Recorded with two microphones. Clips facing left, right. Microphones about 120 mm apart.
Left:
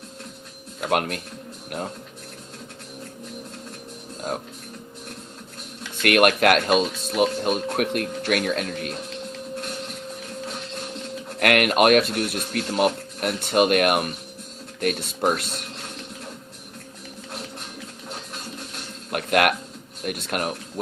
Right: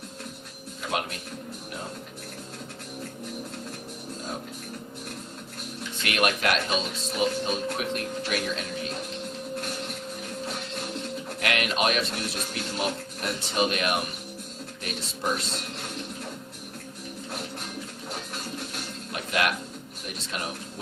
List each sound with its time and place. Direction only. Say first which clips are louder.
0.8 s speech: left 7 dB; 60° left (ahead or behind)
6.0 s speech: left 8 dB; 60° left (ahead or behind)
11.3 s speech: left 9 dB; 55° left (ahead or behind)
19.1 s music: left 7 dB; 60° left (ahead or behind)
20.1 s speech: left 8 dB; 60° left (ahead or behind)